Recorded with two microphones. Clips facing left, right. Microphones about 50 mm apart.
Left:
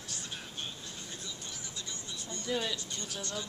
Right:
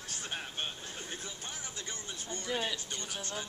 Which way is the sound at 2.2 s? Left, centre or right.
Right.